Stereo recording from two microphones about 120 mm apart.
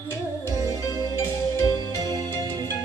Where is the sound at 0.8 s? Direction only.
30° left (ahead or behind).